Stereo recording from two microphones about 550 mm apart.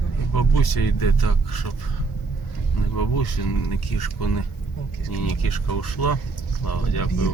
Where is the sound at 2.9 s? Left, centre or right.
Left.